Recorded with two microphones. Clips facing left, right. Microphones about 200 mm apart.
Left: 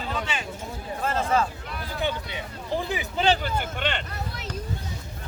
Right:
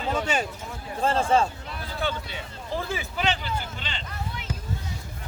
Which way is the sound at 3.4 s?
55° left (ahead or behind).